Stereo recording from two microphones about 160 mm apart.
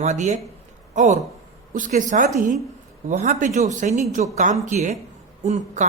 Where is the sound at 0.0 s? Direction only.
50° right (ahead or behind).